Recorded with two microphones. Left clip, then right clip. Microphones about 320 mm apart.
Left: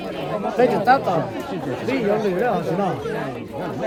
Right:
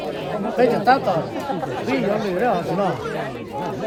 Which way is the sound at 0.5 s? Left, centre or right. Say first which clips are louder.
Even; centre.